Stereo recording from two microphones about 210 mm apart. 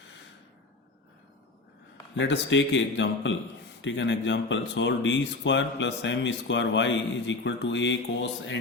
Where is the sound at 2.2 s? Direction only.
60° left (ahead or behind).